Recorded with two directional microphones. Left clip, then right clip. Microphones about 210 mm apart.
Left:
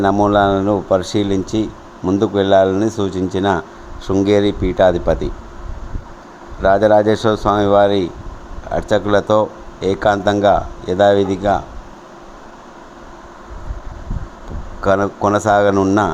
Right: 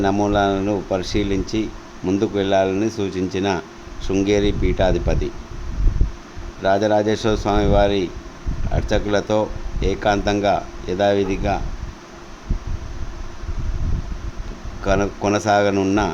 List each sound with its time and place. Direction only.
0.0 s speech: 15° left (ahead or behind)
6.6 s speech: 15° left (ahead or behind)
15.0 s speech: 10° left (ahead or behind)